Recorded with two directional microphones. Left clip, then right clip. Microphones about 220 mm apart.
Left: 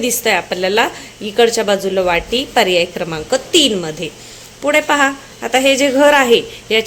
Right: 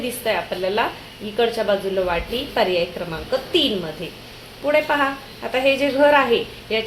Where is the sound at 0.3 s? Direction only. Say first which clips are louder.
Left 6 dB; 50° left (ahead or behind).